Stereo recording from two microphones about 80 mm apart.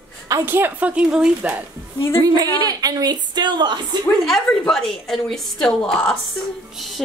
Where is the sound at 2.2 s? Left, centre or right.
Right.